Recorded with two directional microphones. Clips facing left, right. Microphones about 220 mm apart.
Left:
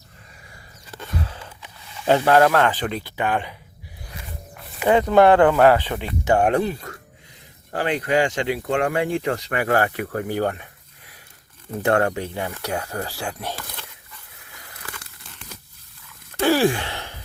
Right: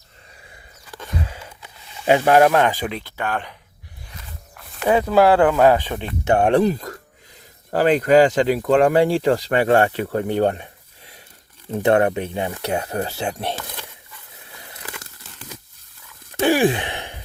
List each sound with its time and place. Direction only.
1.2 s a sound: 10° right (ahead or behind)
2.0 s speech: 15° right (ahead or behind)
3.0 s speech: 15° left (ahead or behind)
4.9 s speech: 5° right (ahead or behind)
5.9 s speech: 5° left (ahead or behind)
6.3 s speech: 25° right (ahead or behind)
16.4 s gasp: 15° right (ahead or behind)